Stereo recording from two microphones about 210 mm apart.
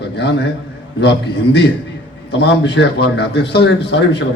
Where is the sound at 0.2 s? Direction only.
55° left (ahead or behind).